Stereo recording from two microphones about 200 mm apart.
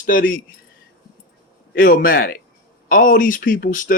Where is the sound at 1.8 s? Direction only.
50° left (ahead or behind).